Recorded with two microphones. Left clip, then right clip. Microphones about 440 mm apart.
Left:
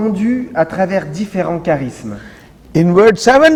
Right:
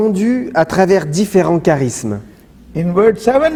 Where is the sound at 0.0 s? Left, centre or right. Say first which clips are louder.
Right 3 dB; right.